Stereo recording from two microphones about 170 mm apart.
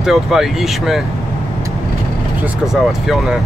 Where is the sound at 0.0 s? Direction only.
Centre (ahead or behind).